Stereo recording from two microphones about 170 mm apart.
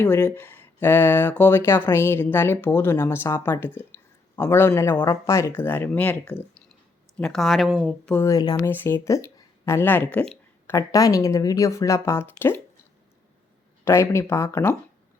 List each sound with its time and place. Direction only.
0.0 s speech: 10° left (ahead or behind)
10.8 s speech: 20° left (ahead or behind)
13.8 s speech: 15° left (ahead or behind)